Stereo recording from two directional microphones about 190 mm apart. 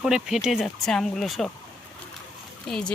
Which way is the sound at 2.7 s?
Centre (ahead or behind).